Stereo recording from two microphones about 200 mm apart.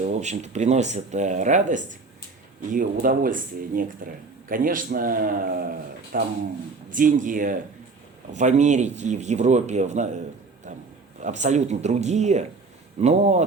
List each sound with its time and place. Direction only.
0.0 s speech: 35° right (ahead or behind)